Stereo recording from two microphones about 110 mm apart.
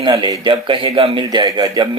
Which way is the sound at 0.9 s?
60° right (ahead or behind).